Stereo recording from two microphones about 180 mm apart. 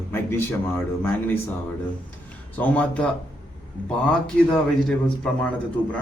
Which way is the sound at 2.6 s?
10° left (ahead or behind).